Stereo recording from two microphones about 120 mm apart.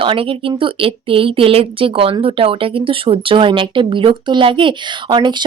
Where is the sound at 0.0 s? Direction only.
50° right (ahead or behind).